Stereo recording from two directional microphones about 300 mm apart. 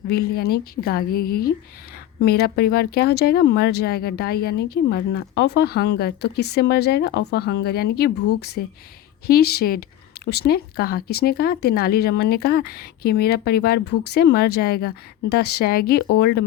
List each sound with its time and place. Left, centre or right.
0.1 s speech: left